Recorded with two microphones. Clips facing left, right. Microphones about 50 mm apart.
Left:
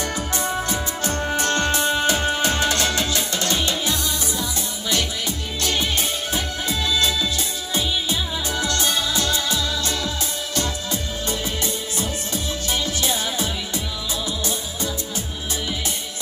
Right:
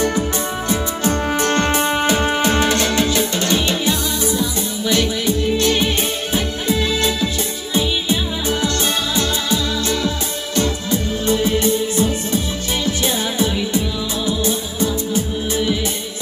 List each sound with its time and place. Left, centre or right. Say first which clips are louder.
0.7 s music: right 6 dB; right